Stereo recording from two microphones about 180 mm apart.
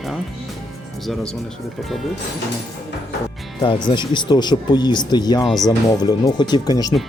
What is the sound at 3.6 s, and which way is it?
Speech, 25° left (ahead or behind).